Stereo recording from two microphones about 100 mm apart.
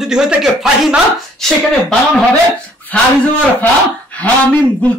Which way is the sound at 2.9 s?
15° left (ahead or behind).